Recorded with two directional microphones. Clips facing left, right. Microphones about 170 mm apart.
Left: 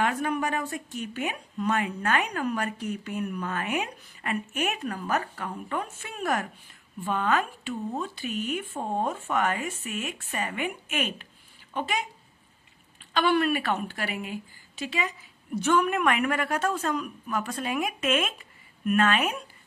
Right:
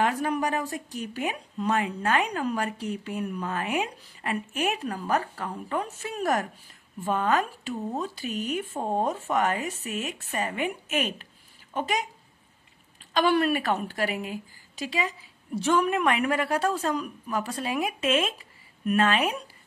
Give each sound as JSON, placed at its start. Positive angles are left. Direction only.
{"t": 0.0, "sound": "speech", "side_deg": -35}
{"t": 13.1, "sound": "speech", "side_deg": -40}